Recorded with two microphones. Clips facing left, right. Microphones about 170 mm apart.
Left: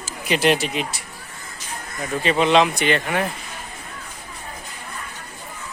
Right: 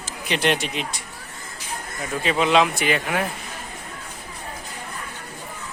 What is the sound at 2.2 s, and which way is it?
Speech, centre (ahead or behind).